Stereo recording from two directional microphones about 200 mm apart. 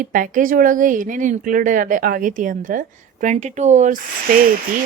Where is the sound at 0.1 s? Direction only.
40° right (ahead or behind).